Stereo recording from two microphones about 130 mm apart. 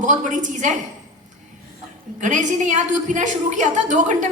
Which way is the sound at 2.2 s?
70° right (ahead or behind).